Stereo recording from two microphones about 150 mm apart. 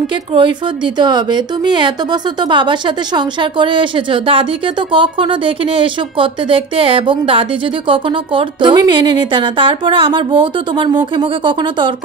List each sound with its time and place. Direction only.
0.9 s a woman's voice: 30° right (ahead or behind)